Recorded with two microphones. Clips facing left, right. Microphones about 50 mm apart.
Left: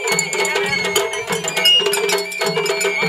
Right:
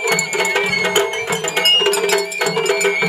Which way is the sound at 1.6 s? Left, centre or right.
Centre.